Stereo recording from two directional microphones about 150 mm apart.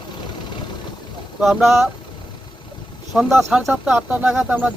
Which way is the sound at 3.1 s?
5° right (ahead or behind).